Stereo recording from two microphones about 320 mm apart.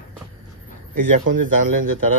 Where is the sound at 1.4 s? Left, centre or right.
Right.